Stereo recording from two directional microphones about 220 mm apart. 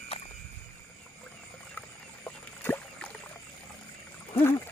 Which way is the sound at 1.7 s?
5° left (ahead or behind).